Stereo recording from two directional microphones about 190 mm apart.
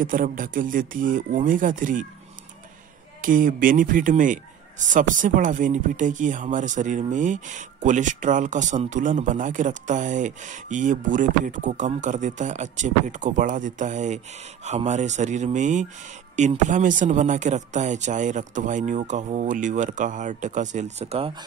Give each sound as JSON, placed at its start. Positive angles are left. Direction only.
{"t": 0.0, "sound": "speech", "side_deg": -45}
{"t": 3.2, "sound": "a man's voice", "side_deg": -45}